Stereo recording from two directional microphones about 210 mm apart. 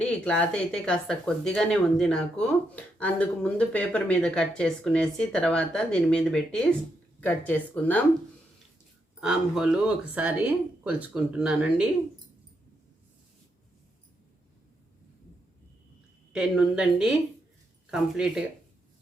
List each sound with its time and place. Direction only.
0.0 s speech: 5° left (ahead or behind)
9.2 s speech: 5° right (ahead or behind)
16.3 s speech: 5° right (ahead or behind)